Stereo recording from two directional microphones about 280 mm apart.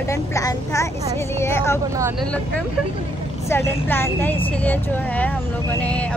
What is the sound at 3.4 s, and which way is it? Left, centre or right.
A woman's voice, centre.